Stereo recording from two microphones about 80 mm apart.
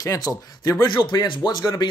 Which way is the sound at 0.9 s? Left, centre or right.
Left.